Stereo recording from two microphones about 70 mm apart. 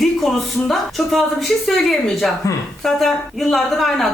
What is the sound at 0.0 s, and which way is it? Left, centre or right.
Speech, centre.